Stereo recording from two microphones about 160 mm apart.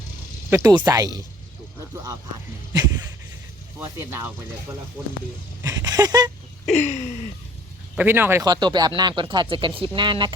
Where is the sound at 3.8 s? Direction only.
15° right (ahead or behind).